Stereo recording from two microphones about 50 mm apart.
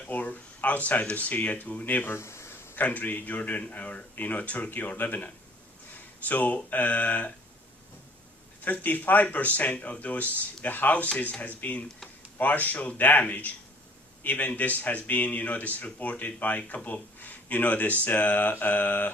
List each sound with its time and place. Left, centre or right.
0.1 s speech: left
2.0 s a sound: left
2.7 s speech: left
8.6 s speech: left